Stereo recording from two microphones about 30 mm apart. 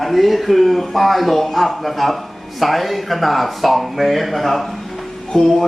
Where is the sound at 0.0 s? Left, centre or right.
Centre.